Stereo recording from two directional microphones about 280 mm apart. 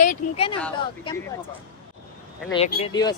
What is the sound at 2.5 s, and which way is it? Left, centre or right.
Speech, centre.